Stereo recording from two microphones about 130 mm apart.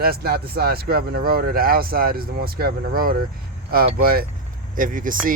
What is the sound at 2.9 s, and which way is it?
Speech, 90° right.